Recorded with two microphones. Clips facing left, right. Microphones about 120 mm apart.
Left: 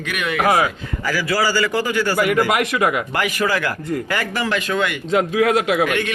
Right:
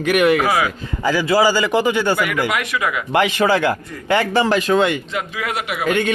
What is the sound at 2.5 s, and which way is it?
Speech, 25° left (ahead or behind).